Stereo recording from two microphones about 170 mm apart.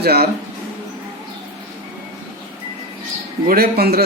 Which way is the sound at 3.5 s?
65° right (ahead or behind).